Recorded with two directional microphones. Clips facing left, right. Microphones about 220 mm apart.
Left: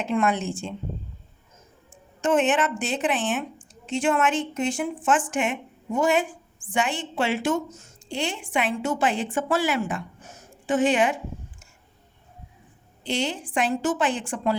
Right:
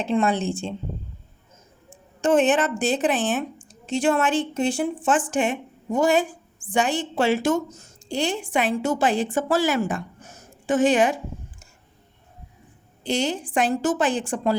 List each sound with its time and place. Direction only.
0.0 s a woman's voice: 30° right (ahead or behind)
2.2 s a woman's voice: 35° right (ahead or behind)
13.1 s a woman's voice: 40° right (ahead or behind)